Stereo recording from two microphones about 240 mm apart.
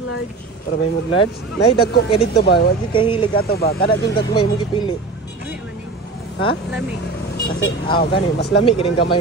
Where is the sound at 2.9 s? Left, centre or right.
Centre.